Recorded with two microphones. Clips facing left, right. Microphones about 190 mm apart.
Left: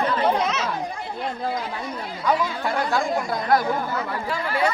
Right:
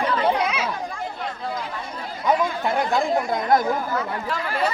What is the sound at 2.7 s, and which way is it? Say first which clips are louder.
Speech: right 2 dB; 20° right (ahead or behind).